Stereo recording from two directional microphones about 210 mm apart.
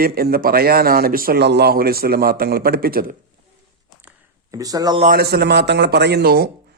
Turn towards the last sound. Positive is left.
turn(degrees=-50)  # may be behind; listen again after turning